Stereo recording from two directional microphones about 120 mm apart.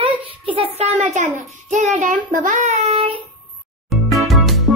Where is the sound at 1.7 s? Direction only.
80° right; by 3.1 s 60° right (ahead or behind).